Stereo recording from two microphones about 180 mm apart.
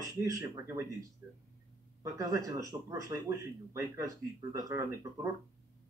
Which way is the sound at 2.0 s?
20° right (ahead or behind).